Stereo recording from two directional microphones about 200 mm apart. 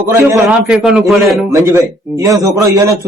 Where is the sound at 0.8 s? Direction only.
Centre (ahead or behind).